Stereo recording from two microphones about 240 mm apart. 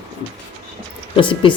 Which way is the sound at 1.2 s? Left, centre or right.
Left.